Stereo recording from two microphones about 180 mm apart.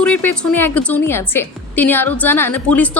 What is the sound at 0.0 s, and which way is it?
A woman's voice, 10° left (ahead or behind).